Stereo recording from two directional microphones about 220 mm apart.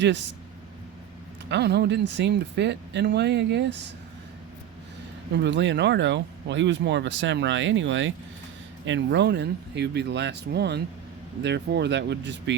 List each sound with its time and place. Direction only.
1.5 s speech: 50° right (ahead or behind)
5.4 s speech: 55° right (ahead or behind)